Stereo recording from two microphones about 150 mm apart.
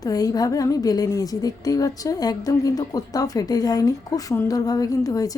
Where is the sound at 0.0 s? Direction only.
25° left (ahead or behind).